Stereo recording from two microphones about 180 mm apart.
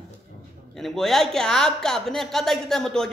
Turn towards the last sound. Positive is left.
turn(degrees=5)  # may be behind; listen again after turning